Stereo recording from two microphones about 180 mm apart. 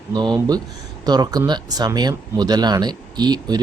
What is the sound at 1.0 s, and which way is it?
Speech, 20° right (ahead or behind).